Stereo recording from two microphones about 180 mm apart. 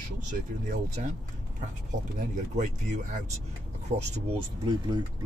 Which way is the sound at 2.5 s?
40° right (ahead or behind).